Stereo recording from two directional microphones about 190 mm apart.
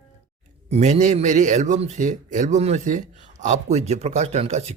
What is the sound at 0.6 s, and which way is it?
A man's voice, 35° right (ahead or behind).